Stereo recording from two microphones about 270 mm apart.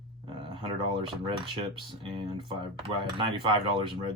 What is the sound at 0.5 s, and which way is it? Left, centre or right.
Speech, centre.